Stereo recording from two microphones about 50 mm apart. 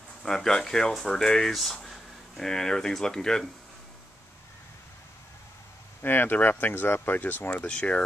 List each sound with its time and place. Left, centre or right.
0.2 s speech: centre
6.0 s speech: left
7.6 s speech: left